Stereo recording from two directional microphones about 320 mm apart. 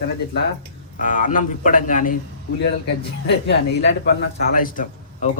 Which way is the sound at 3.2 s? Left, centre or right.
Left.